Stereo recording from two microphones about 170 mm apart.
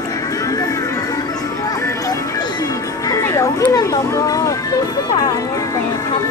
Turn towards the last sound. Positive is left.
turn(degrees=20)  # may be behind; listen again after turning